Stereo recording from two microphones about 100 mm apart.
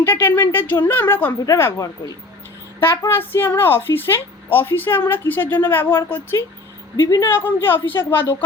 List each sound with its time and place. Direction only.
0.0 s a woman's voice: 20° left (ahead or behind)
3.1 s a woman's voice: 20° left (ahead or behind)